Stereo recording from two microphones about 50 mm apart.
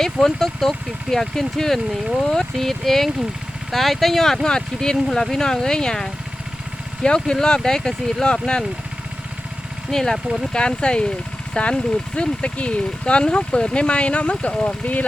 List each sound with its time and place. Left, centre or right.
0.0 s speech: centre
9.9 s speech: centre; by 15.0 s left